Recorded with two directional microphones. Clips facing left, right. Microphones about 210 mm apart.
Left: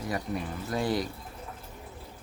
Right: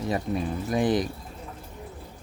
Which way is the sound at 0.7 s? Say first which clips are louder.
Right 5 dB; 20° right (ahead or behind).